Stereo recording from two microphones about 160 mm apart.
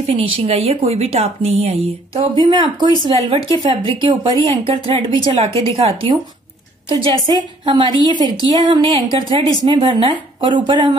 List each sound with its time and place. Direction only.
0.0 s a woman's voice: 35° right (ahead or behind)
5.5 s a woman's voice: 20° left (ahead or behind)
5.8 s a woman's voice: 35° right (ahead or behind)